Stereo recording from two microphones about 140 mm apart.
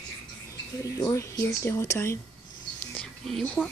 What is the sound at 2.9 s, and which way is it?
Whispering, 5° left (ahead or behind).